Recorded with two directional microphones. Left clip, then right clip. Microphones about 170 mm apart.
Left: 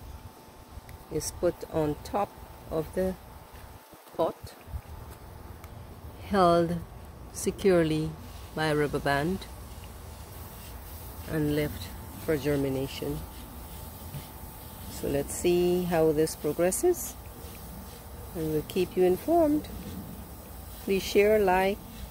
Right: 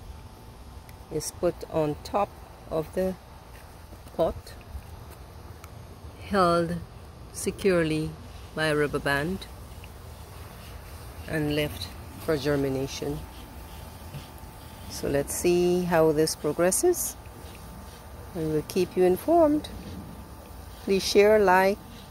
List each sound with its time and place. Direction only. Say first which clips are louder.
1.1 s speech: right 1 dB; centre (ahead or behind)
4.2 s speech: right 3 dB; 5° right (ahead or behind)
6.2 s speech: even; 15° left (ahead or behind)
11.2 s speech: right 1 dB; centre (ahead or behind)
15.0 s speech: right 3 dB; centre (ahead or behind)
18.5 s speech: right 2 dB; 10° right (ahead or behind)
20.8 s speech: right 4 dB; 10° right (ahead or behind)